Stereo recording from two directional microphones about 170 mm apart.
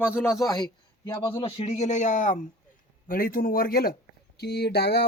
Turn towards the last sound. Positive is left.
turn(degrees=75)  # may be behind; listen again after turning